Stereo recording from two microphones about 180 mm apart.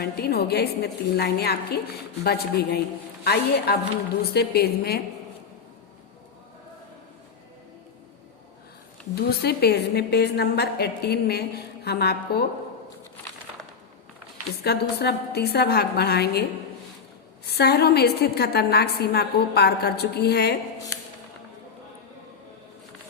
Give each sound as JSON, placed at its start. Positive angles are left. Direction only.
{"t": 0.0, "sound": "a woman's voice", "side_deg": 60}
{"t": 9.4, "sound": "a woman's voice", "side_deg": 60}
{"t": 14.6, "sound": "a woman's voice", "side_deg": 65}
{"t": 17.4, "sound": "a woman's voice", "side_deg": 65}